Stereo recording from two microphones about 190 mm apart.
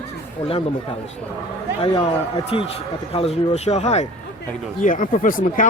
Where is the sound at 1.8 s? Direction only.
30° left (ahead or behind); by 5.6 s 45° left (ahead or behind).